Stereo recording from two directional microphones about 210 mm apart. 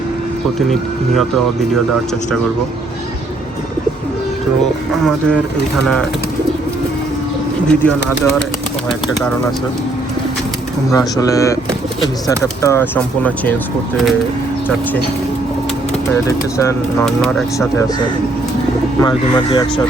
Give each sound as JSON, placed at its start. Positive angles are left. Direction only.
{"t": 7.7, "sound": "speech", "side_deg": 10}
{"t": 10.9, "sound": "speech", "side_deg": 15}
{"t": 12.6, "sound": "speech", "side_deg": 10}
{"t": 16.6, "sound": "speech", "side_deg": 15}
{"t": 18.9, "sound": "speech", "side_deg": 20}